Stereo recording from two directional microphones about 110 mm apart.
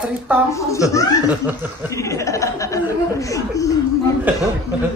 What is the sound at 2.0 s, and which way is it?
Speech, 30° left (ahead or behind).